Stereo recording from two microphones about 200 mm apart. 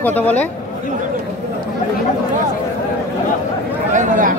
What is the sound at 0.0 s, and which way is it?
Speech, 10° left (ahead or behind).